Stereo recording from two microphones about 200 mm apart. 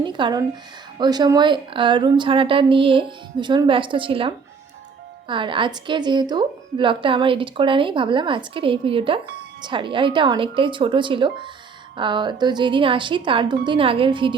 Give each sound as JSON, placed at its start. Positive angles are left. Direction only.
{"t": 0.0, "sound": "a woman's voice", "side_deg": -20}